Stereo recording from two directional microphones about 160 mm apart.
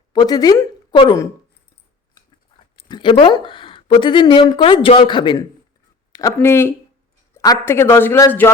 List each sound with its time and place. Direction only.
0.1 s speech: 25° left (ahead or behind)
2.7 s speech: 30° left (ahead or behind)
6.1 s a man's voice: 20° left (ahead or behind)